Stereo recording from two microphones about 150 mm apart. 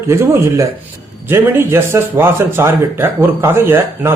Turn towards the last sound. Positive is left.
turn(degrees=-15)  # may be behind; listen again after turning